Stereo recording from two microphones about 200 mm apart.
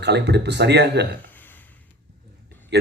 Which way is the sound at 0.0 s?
60° right (ahead or behind).